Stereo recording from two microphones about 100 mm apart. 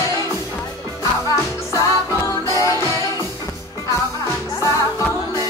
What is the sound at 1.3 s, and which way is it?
Music, 30° left (ahead or behind).